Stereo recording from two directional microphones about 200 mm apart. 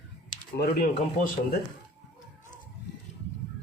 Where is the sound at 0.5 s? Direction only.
50° left (ahead or behind).